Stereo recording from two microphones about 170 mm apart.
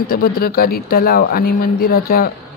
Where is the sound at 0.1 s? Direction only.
60° left (ahead or behind).